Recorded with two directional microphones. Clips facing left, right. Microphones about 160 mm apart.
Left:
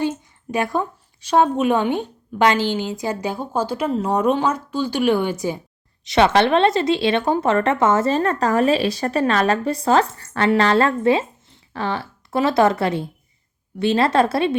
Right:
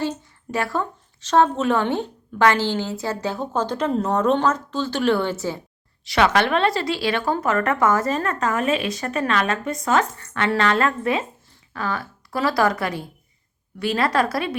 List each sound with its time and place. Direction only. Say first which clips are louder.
0.0 s a woman's voice: left 3 dB; 15° left (ahead or behind)
6.1 s a woman's voice: left 3 dB; 25° left (ahead or behind)